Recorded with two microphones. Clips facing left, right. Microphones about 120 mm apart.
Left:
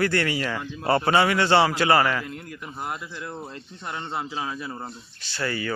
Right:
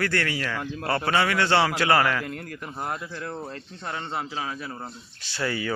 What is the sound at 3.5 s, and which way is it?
Speech, 10° left (ahead or behind).